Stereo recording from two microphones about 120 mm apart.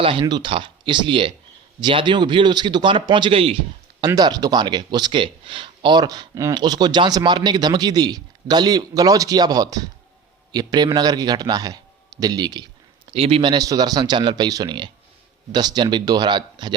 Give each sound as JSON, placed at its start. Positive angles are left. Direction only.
{"t": 0.0, "sound": "a man's voice", "side_deg": -45}
{"t": 4.0, "sound": "a man's voice", "side_deg": -35}
{"t": 13.1, "sound": "a man's voice", "side_deg": -55}